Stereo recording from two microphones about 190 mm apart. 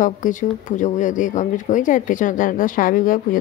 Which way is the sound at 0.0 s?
45° left (ahead or behind).